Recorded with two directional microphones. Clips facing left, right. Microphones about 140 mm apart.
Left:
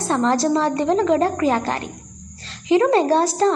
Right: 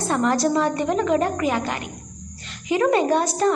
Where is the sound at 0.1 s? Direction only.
25° left (ahead or behind).